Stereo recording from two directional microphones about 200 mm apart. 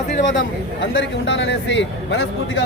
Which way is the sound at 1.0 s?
65° left (ahead or behind).